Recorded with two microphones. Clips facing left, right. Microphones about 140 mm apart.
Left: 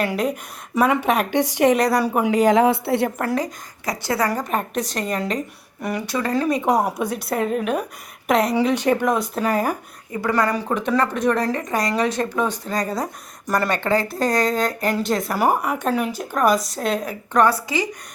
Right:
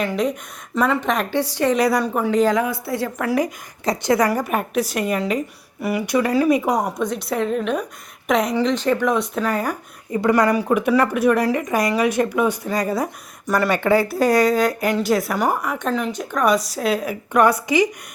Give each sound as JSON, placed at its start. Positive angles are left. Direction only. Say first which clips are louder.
{"t": 0.0, "sound": "speech", "louder": "right 1 dB", "side_deg": 5}
{"t": 1.7, "sound": "speech", "louder": "even", "side_deg": 0}
{"t": 2.6, "sound": "a woman's voice", "louder": "left 5 dB", "side_deg": 25}
{"t": 3.8, "sound": "a woman's voice", "louder": "right 4 dB", "side_deg": -20}
{"t": 6.7, "sound": "speech", "louder": "left 1 dB", "side_deg": 5}
{"t": 8.5, "sound": "speech", "louder": "even", "side_deg": 10}
{"t": 9.0, "sound": "speech", "louder": "even", "side_deg": 0}
{"t": 10.1, "sound": "a woman's voice", "louder": "right 4 dB", "side_deg": -20}
{"t": 15.4, "sound": "speech", "louder": "left 2 dB", "side_deg": 10}